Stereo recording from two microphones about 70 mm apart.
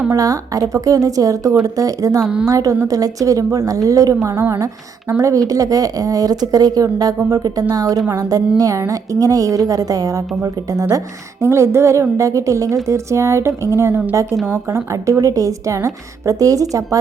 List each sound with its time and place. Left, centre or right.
0.1 s speech: right
2.2 s a woman's voice: centre
2.5 s a woman's voice: right